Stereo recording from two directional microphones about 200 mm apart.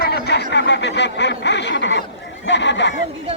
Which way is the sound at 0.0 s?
55° left (ahead or behind).